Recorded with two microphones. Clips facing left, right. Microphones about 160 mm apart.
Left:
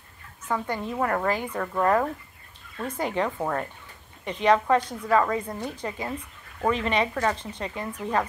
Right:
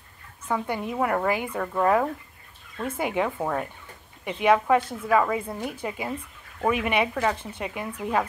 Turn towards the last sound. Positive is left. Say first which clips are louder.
# even
turn(degrees=-10)  # may be behind; listen again after turning